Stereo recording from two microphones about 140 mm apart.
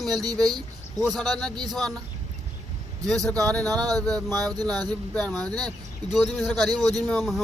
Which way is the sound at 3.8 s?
25° right (ahead or behind).